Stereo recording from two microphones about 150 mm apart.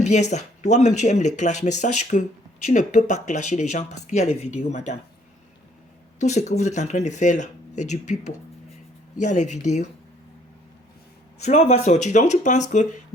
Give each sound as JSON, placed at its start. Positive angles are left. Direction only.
{"t": 0.0, "sound": "speech", "side_deg": 50}
{"t": 6.1, "sound": "speech", "side_deg": 50}
{"t": 11.3, "sound": "speech", "side_deg": 45}